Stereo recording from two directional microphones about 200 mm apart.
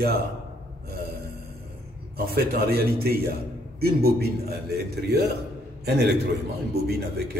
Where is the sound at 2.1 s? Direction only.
50° right (ahead or behind).